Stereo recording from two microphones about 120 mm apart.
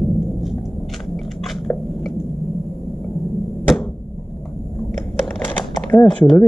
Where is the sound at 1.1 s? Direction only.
Centre (ahead or behind).